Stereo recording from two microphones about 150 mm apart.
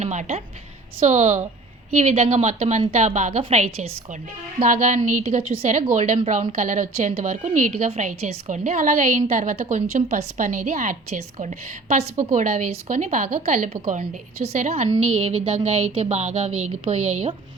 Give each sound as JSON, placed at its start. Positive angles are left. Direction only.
{"t": 0.0, "sound": "a woman's voice", "side_deg": -50}
{"t": 4.6, "sound": "a woman's voice", "side_deg": -55}
{"t": 14.5, "sound": "a woman's voice", "side_deg": -45}